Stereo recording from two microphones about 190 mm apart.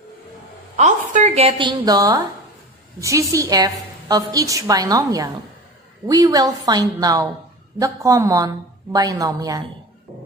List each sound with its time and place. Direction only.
0.7 s a woman's voice: 40° right (ahead or behind); by 9.6 s 20° right (ahead or behind)